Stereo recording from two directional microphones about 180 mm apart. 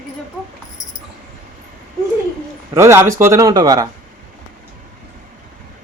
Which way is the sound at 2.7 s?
15° right (ahead or behind).